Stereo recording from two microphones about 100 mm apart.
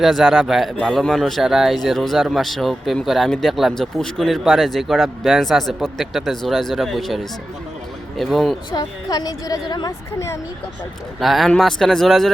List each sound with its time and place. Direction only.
0.0 s speech: centre (ahead or behind)
8.7 s a woman's voice: 40° left (ahead or behind)
11.2 s speech: centre (ahead or behind)